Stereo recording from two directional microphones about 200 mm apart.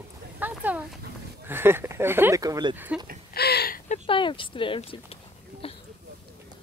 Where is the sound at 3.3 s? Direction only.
55° left (ahead or behind).